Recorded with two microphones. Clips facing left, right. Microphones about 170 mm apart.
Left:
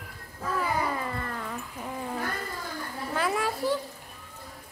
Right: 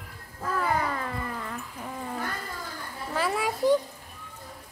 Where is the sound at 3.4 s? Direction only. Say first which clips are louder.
Right 5 dB; 15° right (ahead or behind).